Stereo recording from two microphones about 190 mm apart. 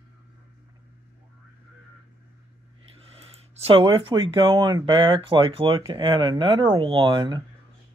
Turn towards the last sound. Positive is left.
turn(degrees=-25)  # may be behind; listen again after turning